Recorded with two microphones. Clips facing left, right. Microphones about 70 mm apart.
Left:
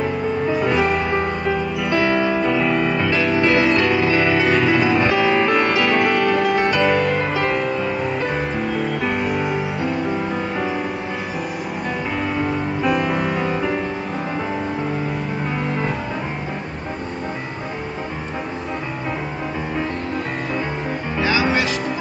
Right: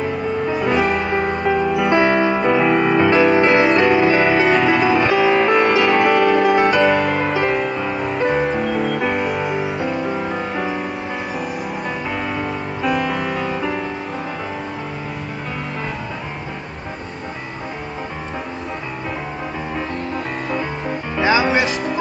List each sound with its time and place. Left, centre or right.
0.5 s music: centre
1.9 s music: right
2.1 s music: centre
2.4 s music: right; by 10.8 s centre
12.2 s music: centre
21.4 s music: centre